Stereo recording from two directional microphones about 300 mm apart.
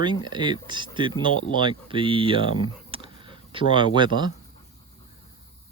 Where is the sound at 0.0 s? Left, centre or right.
Centre.